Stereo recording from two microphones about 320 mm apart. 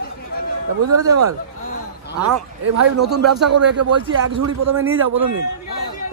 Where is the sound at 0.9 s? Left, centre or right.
Right.